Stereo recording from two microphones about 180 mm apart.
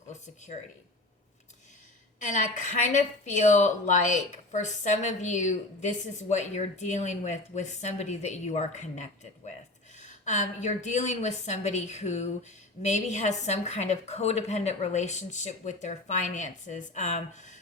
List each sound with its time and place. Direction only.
0.1 s speech: 40° left (ahead or behind)
2.1 s a woman's voice: 45° left (ahead or behind)